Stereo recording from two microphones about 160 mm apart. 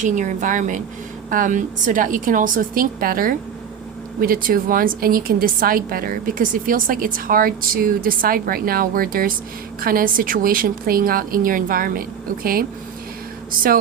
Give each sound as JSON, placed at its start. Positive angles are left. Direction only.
{"t": 0.0, "sound": "a woman's voice", "side_deg": -50}